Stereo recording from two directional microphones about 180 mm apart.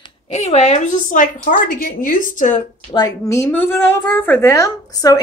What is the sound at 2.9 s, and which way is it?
A woman's voice, 20° left (ahead or behind).